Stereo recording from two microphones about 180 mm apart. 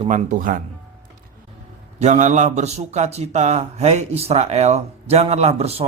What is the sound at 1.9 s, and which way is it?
A man's voice, 40° right (ahead or behind).